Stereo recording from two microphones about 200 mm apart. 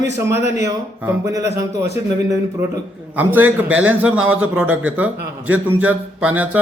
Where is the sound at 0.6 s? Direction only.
15° right (ahead or behind).